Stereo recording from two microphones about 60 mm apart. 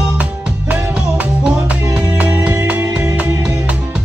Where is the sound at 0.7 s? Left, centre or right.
Right.